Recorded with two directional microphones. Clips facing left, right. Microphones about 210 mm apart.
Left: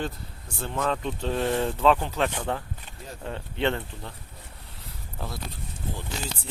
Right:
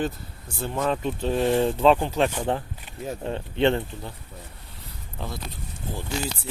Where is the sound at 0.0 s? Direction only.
5° right (ahead or behind); by 3.8 s 20° right (ahead or behind).